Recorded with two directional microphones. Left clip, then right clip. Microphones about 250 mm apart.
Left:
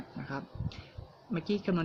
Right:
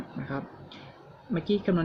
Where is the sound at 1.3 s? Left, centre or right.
Centre.